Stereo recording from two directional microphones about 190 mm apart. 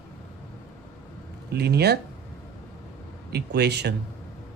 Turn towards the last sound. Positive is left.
turn(degrees=-60)  # may be behind; listen again after turning